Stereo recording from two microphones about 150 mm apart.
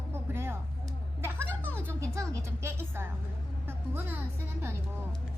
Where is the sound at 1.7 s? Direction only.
20° right (ahead or behind).